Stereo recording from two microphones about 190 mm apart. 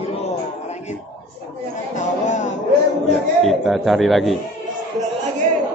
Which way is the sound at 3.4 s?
Centre (ahead or behind).